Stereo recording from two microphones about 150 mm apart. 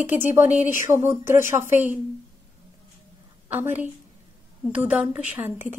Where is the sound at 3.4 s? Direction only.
10° right (ahead or behind).